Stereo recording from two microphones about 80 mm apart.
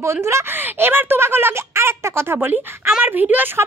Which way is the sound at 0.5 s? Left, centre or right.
Right.